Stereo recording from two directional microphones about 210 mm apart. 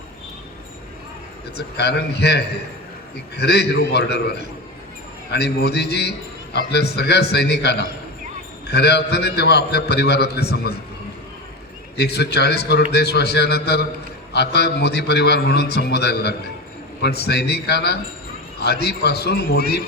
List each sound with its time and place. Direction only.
1.5 s a man's voice: 50° left (ahead or behind)
5.3 s a man's voice: 50° left (ahead or behind)
11.9 s a man's voice: 50° left (ahead or behind)